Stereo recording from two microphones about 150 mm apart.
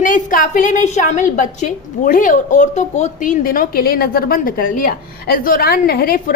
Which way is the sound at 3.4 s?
70° left (ahead or behind).